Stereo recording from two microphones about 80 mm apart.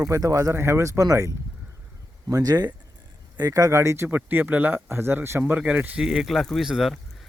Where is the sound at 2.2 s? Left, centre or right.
Right.